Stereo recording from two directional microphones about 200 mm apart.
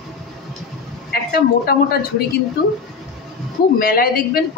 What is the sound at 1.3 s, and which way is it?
Speech, 50° left (ahead or behind).